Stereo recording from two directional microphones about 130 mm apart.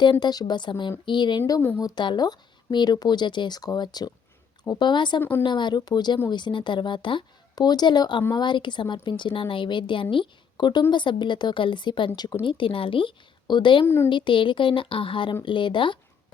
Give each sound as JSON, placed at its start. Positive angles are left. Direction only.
{"t": 0.0, "sound": "speech", "side_deg": 35}
{"t": 13.8, "sound": "speech", "side_deg": 20}
{"t": 14.1, "sound": "speech", "side_deg": 40}